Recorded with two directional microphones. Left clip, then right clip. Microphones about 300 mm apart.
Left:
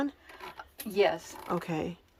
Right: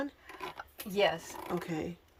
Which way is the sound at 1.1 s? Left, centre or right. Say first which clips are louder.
Left 3 dB; centre.